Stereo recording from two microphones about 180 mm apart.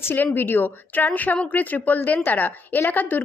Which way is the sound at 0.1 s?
10° left (ahead or behind).